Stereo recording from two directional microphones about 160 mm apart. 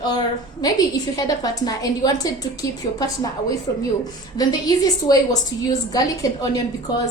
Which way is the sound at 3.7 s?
20° left (ahead or behind).